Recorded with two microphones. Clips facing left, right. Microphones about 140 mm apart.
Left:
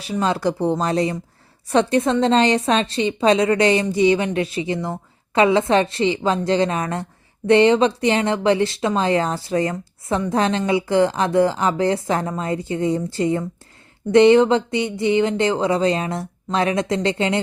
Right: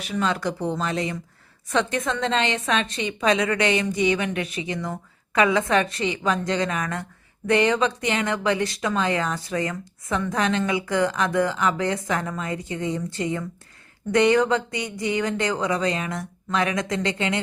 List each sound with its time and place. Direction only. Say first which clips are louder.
0.0 s a woman's voice: left 4 dB; 35° left (ahead or behind)